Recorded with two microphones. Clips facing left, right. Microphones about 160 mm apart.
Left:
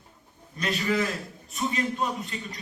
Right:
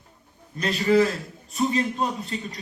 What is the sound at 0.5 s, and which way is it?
Speech, 35° right (ahead or behind).